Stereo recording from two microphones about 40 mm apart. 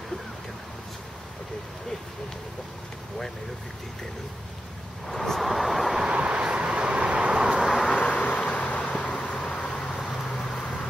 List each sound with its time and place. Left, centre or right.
5.0 s vehicle: centre
6.0 s vehicle: right
8.0 s vehicle: left
9.1 s a sound: left
9.9 s vehicle: centre